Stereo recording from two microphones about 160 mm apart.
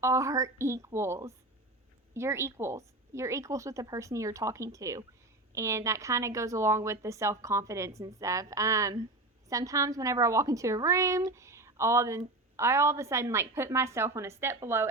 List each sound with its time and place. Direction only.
0.0 s a woman's voice: 20° right (ahead or behind)